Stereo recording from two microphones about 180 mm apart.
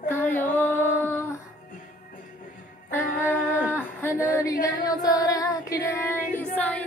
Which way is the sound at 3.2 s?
10° left (ahead or behind).